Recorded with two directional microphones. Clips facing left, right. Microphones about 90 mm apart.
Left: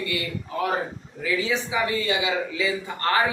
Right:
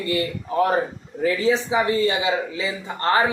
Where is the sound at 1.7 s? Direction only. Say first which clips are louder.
Right 5 dB; 30° right (ahead or behind).